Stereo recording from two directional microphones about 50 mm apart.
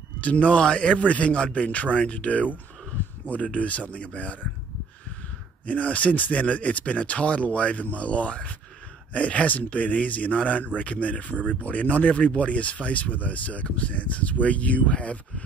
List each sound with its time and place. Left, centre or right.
0.2 s speech: left
5.7 s speech: left